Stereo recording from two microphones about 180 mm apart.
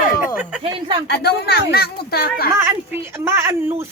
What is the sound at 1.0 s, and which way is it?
Speech, 65° left (ahead or behind).